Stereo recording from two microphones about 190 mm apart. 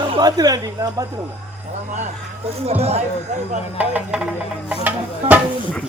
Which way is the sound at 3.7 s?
10° right (ahead or behind).